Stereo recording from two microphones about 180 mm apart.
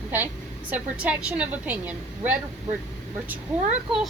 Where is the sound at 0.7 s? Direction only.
10° right (ahead or behind).